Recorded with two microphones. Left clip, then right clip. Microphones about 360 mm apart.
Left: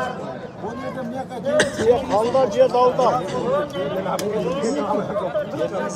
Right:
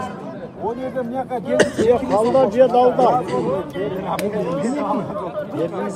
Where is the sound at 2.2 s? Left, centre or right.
Right.